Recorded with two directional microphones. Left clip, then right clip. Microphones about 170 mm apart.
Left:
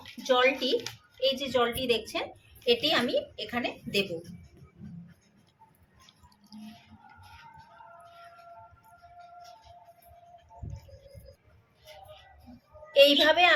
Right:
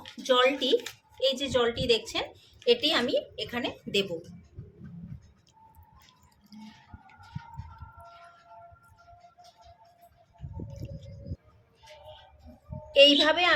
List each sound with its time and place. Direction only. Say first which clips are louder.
0.2 s a woman's voice: right 1 dB; 20° right (ahead or behind)
12.9 s a woman's voice: right 1 dB; 15° right (ahead or behind)